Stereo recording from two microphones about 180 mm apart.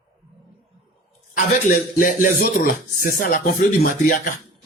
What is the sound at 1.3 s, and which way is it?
Speech, 50° left (ahead or behind).